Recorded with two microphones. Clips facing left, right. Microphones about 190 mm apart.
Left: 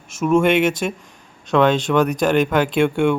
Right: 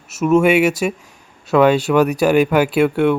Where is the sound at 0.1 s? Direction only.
5° right (ahead or behind).